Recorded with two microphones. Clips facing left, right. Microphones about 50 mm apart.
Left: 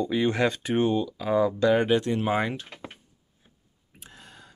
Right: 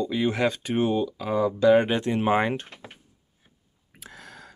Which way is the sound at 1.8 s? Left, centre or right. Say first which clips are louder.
Left 1 dB; right.